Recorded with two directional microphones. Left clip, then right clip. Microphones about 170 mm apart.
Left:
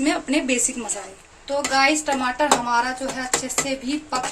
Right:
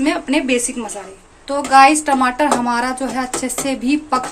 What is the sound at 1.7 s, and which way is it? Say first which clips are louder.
A woman's voice: right 10 dB; 30° right (ahead or behind).